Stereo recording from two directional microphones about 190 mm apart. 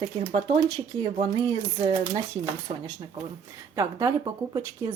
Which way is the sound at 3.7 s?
20° right (ahead or behind).